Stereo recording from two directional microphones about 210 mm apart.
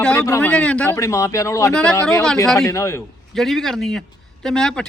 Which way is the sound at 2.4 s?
Centre (ahead or behind).